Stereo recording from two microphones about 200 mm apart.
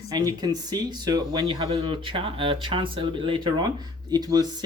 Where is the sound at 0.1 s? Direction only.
20° right (ahead or behind).